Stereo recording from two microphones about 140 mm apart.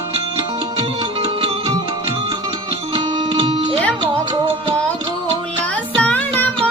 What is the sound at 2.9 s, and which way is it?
Music, 40° right (ahead or behind).